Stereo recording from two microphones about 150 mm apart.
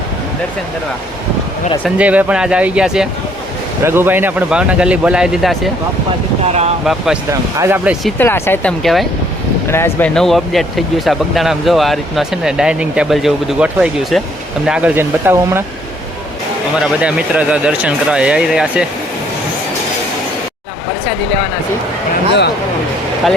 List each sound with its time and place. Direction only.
2.0 s speech: 10° right (ahead or behind)
3.8 s speech: 15° right (ahead or behind)
6.5 s speech: 45° right (ahead or behind)
6.8 s speech: 5° right (ahead or behind)
7.6 s speech: 15° right (ahead or behind)
8.2 s speech: 15° left (ahead or behind)
8.8 s speech: centre (ahead or behind)
9.6 s speech: 15° left (ahead or behind)
10.2 s speech: centre (ahead or behind); by 15.6 s 15° right (ahead or behind)
16.8 s speech: 10° right (ahead or behind)